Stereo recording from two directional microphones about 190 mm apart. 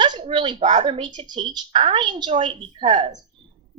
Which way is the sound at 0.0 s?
25° right (ahead or behind).